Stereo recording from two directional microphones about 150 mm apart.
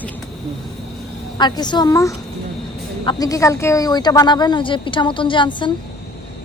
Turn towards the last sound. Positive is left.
turn(degrees=30)  # may be behind; listen again after turning